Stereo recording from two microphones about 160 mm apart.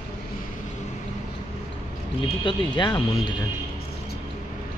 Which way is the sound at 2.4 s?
30° left (ahead or behind).